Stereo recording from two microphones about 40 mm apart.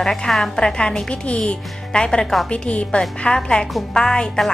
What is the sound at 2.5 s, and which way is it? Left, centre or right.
Speech, left.